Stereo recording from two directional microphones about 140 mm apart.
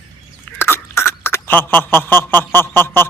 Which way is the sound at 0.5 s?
15° left (ahead or behind).